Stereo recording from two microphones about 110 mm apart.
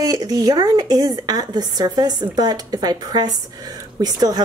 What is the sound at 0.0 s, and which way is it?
A woman's voice, 35° right (ahead or behind).